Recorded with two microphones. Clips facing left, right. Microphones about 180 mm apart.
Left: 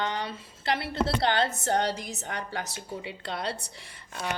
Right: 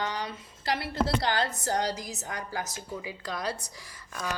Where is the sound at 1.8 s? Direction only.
65° left (ahead or behind).